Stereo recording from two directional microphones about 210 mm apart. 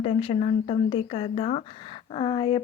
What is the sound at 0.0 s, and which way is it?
A woman's voice, 30° left (ahead or behind).